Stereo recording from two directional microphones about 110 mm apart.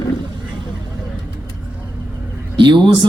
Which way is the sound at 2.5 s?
45° right (ahead or behind).